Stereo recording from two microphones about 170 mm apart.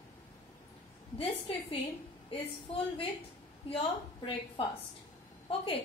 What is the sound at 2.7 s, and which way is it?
A woman's voice, 35° left (ahead or behind).